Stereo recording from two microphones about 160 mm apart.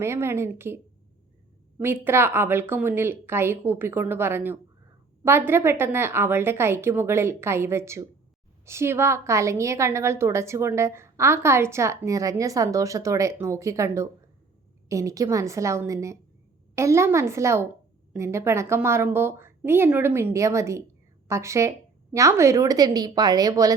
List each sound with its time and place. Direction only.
0.0 s a woman's voice: 15° right (ahead or behind)
1.8 s a woman's voice: 15° right (ahead or behind)